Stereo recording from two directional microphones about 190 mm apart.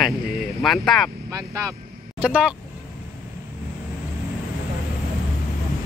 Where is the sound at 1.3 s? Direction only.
20° right (ahead or behind).